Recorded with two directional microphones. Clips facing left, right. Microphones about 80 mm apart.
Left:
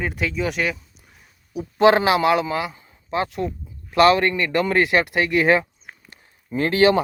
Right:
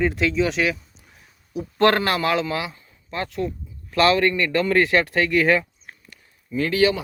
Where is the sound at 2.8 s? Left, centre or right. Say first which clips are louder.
Left 5 dB; centre.